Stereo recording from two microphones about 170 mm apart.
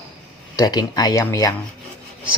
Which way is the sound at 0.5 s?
25° left (ahead or behind).